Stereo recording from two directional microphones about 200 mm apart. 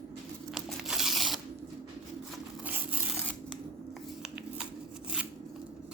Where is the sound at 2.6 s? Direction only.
10° right (ahead or behind).